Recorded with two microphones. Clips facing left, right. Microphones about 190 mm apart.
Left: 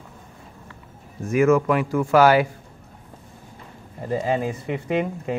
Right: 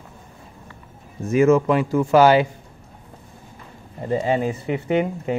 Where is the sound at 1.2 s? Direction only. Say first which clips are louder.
Right 2 dB; 25° right (ahead or behind).